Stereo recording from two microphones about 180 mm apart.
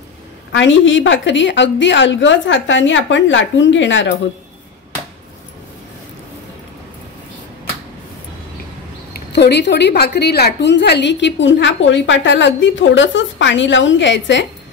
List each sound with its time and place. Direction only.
0.5 s a woman's voice: 90° left
9.1 s a woman's voice: 65° left (ahead or behind); by 14.5 s 85° left